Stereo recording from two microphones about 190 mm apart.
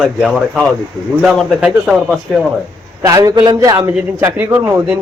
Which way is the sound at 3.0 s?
20° right (ahead or behind).